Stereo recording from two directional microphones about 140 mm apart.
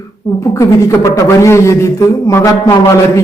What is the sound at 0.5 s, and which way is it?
A man's voice, 20° left (ahead or behind).